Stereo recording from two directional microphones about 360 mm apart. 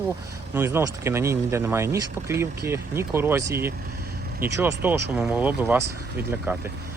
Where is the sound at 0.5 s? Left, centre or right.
Centre.